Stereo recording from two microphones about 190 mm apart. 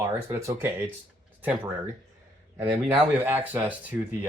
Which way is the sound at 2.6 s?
5° right (ahead or behind).